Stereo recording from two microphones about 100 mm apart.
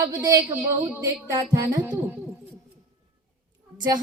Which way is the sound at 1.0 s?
35° right (ahead or behind).